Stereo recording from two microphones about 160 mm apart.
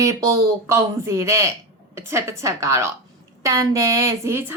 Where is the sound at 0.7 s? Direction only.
20° right (ahead or behind).